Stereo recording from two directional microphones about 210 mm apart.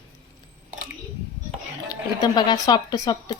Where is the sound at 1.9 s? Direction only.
20° left (ahead or behind).